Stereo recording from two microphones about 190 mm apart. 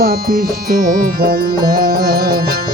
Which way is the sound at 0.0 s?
50° right (ahead or behind).